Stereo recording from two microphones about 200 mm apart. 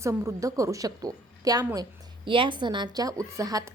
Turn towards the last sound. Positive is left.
turn(degrees=-15)  # may be behind; listen again after turning